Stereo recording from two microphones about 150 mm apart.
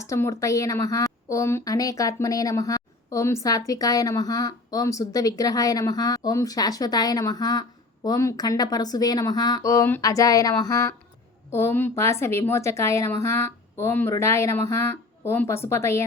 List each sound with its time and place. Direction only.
0.0 s a woman's voice: 20° left (ahead or behind)